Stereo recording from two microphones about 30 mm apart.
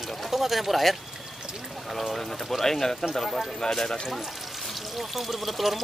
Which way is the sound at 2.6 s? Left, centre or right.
Centre.